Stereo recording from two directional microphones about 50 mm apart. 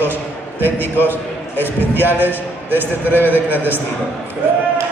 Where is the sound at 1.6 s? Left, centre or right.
Right.